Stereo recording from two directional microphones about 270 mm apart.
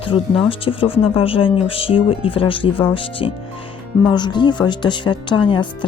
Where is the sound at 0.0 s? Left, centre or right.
Centre.